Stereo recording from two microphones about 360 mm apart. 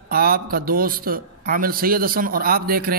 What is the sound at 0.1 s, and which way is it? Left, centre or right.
A man's voice, right.